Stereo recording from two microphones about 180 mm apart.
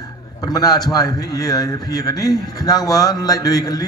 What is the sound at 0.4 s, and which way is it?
A man's voice, 20° left (ahead or behind).